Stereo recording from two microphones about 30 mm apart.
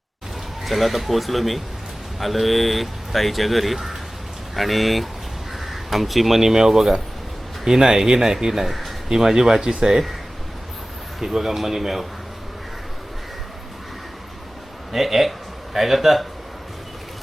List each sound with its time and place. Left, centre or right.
0.6 s speech: centre
8.6 s speech: centre
9.0 s speech: centre
11.2 s speech: centre
14.9 s speech: centre